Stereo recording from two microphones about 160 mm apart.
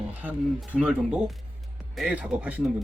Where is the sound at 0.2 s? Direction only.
10° right (ahead or behind).